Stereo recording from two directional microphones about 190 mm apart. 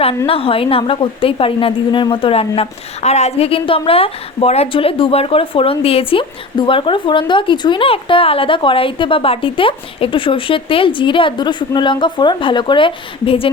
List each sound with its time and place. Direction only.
0.3 s a woman's voice: 30° left (ahead or behind)